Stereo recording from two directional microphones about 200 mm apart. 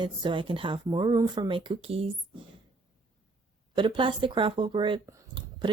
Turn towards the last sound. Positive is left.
turn(degrees=-25)  # may be behind; listen again after turning